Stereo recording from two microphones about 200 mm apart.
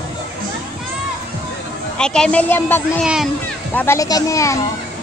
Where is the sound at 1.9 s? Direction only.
5° left (ahead or behind).